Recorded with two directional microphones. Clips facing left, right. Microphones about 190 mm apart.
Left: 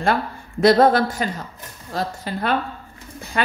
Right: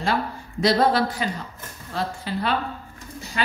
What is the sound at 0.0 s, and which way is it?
A woman's voice, 55° left (ahead or behind).